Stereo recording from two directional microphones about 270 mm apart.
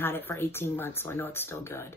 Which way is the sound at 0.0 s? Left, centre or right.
Centre.